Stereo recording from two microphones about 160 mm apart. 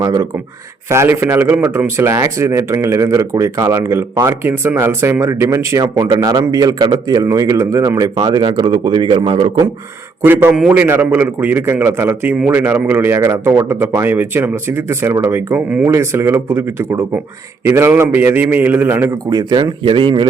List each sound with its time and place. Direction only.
0.0 s speech: 25° right (ahead or behind)
10.2 s speech: 15° right (ahead or behind); by 20.2 s 30° right (ahead or behind)